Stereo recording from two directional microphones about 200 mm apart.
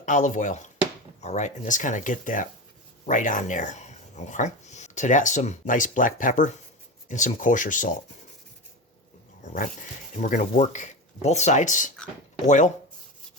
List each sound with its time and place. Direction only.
0.0 s speech: 40° left (ahead or behind)
9.4 s speech: 40° left (ahead or behind)